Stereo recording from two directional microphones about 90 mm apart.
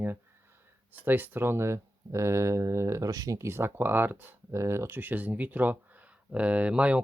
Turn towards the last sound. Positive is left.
turn(degrees=-10)  # may be behind; listen again after turning